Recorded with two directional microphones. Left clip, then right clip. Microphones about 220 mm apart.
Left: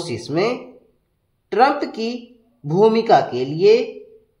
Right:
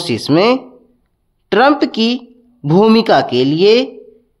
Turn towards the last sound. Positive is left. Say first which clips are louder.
# right 5 dB
turn(degrees=-35)  # may be behind; listen again after turning